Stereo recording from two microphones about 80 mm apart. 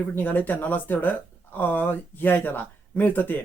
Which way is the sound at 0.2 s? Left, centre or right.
Left.